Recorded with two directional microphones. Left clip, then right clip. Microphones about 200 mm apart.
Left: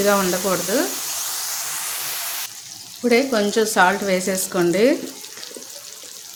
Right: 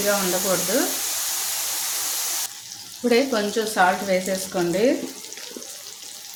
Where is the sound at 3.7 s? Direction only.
35° left (ahead or behind).